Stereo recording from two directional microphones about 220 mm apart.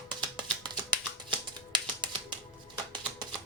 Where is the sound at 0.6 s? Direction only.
20° right (ahead or behind).